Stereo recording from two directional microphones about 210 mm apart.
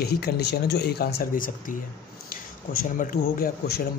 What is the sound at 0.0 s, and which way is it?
A man's voice, 50° left (ahead or behind).